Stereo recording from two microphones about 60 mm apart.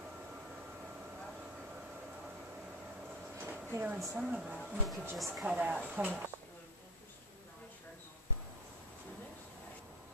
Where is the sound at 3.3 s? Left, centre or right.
Right.